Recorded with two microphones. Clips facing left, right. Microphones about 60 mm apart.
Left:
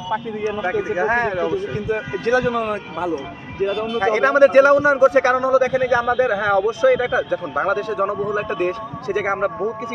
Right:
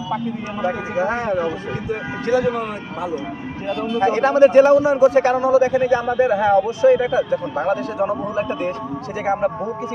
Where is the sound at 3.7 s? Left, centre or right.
Right.